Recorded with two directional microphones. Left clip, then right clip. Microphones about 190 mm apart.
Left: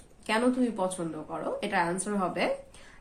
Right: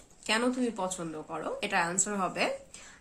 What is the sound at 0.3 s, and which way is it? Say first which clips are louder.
A woman's voice: left 2 dB; 15° right (ahead or behind).